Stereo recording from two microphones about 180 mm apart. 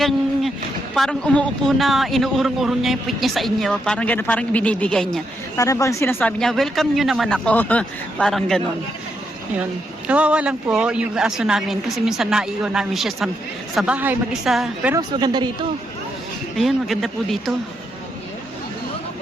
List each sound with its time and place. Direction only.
0.9 s a man's voice: 5° left (ahead or behind)
5.5 s a man's voice: 15° left (ahead or behind)
10.1 s a man's voice: 5° right (ahead or behind)
14.9 s a woman's voice: 25° right (ahead or behind)
16.6 s a man's voice: centre (ahead or behind)